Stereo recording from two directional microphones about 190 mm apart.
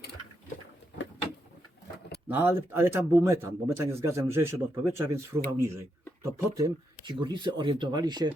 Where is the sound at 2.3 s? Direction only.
10° right (ahead or behind).